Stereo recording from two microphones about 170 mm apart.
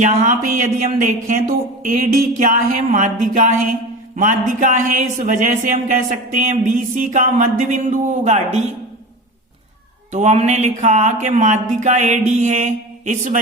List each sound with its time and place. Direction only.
0.0 s speech: 55° right (ahead or behind)
10.1 s speech: 45° right (ahead or behind)